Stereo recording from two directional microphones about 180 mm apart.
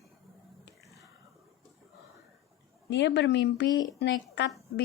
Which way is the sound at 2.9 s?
75° left (ahead or behind).